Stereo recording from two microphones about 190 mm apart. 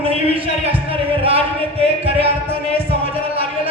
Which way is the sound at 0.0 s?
30° right (ahead or behind).